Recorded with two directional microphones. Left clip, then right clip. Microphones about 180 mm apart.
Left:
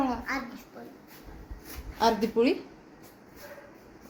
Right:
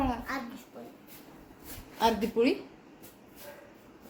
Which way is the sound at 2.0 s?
20° left (ahead or behind).